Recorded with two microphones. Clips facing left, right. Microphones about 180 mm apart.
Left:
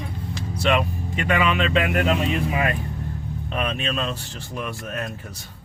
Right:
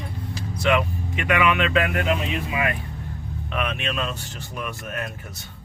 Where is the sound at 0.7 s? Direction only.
30° left (ahead or behind).